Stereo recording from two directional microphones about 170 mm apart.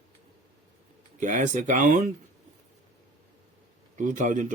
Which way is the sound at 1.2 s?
45° right (ahead or behind).